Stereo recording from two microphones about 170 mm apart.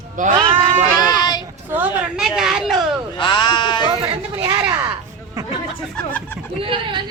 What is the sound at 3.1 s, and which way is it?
Speech, 25° left (ahead or behind).